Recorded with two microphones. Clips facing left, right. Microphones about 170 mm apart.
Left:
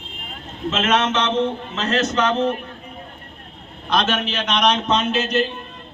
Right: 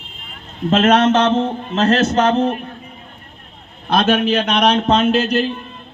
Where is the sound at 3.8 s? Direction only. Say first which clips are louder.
Right 6 dB; 55° right (ahead or behind).